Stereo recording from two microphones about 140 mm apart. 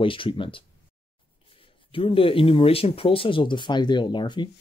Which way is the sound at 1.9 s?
40° left (ahead or behind).